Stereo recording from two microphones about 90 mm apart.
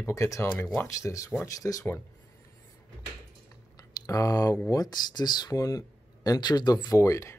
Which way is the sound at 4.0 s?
40° left (ahead or behind).